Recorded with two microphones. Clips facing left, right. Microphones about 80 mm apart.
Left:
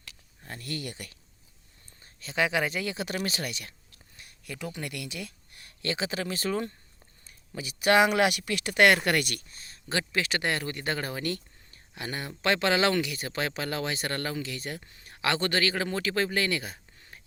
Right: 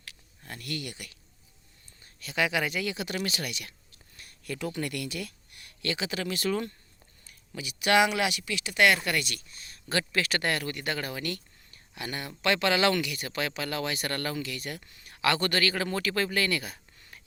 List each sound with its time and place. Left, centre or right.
0.4 s speech: left
2.2 s speech: left
4.2 s speech: centre
5.5 s speech: left
7.5 s speech: left